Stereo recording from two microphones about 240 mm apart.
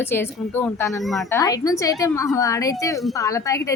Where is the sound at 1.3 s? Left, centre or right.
Centre.